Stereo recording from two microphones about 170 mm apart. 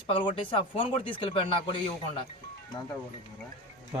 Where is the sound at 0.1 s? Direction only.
30° left (ahead or behind).